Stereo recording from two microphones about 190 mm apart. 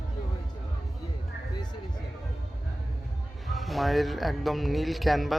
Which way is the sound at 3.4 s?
Centre (ahead or behind).